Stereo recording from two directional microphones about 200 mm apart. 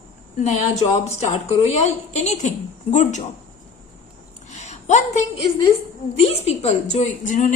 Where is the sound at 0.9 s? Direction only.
35° left (ahead or behind).